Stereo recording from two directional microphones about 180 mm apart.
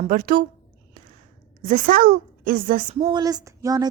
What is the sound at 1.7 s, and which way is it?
A woman's voice, 50° right (ahead or behind).